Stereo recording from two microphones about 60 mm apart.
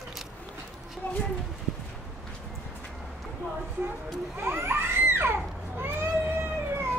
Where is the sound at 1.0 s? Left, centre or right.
Left.